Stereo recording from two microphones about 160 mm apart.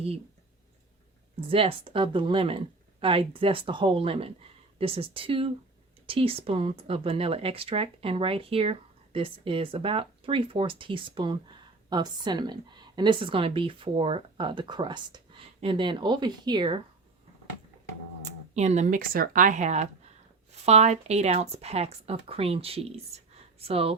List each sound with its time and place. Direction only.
1.4 s speech: 35° right (ahead or behind)
18.3 s speech: 45° right (ahead or behind)
23.3 s a sound: 40° right (ahead or behind)